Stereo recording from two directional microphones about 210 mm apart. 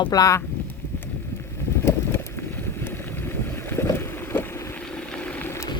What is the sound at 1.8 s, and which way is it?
Vehicle, 10° left (ahead or behind).